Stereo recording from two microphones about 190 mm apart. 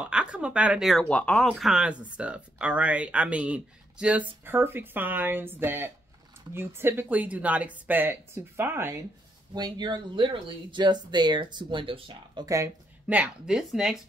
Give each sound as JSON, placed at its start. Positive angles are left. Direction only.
{"t": 0.0, "sound": "speech", "side_deg": -5}
{"t": 13.0, "sound": "speech", "side_deg": -5}